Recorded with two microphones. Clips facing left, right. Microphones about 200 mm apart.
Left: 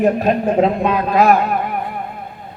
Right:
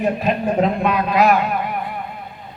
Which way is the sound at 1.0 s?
45° left (ahead or behind).